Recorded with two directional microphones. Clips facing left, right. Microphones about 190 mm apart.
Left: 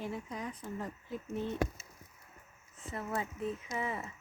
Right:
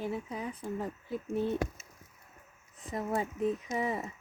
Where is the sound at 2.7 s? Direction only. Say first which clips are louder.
Right 5 dB; 15° right (ahead or behind).